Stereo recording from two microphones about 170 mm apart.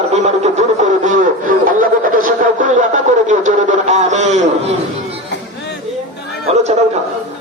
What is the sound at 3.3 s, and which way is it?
A man's voice, 45° right (ahead or behind).